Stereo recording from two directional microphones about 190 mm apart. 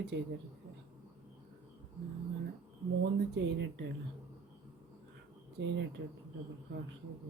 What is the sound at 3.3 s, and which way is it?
Speech, 65° right (ahead or behind).